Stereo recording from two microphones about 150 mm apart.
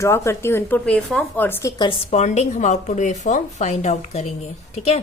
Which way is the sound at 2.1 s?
50° left (ahead or behind).